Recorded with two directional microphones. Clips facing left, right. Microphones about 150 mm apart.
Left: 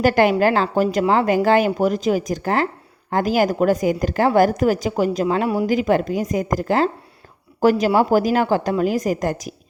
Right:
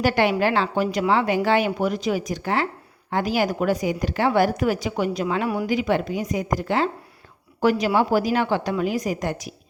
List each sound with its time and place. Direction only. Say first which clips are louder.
0.0 s a woman's voice: left 4 dB; 45° left (ahead or behind)
5.6 s a woman's voice: left 4 dB; 45° left (ahead or behind)